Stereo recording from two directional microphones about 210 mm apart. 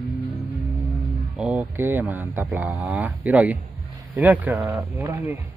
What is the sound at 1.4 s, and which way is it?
Speech, 5° right (ahead or behind).